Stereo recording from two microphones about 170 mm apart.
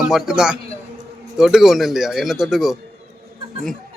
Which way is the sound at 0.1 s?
5° right (ahead or behind).